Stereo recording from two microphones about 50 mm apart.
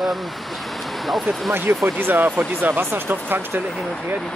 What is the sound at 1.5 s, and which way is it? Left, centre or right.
Speech, right.